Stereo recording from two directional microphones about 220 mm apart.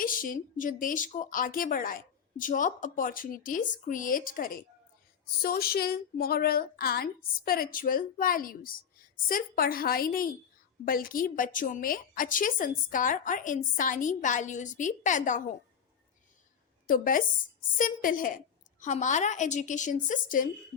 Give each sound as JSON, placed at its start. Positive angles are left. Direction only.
{"t": 0.0, "sound": "a woman's voice", "side_deg": 40}
{"t": 16.8, "sound": "a woman's voice", "side_deg": 40}